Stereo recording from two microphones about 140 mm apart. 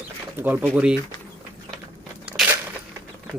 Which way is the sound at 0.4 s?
15° right (ahead or behind).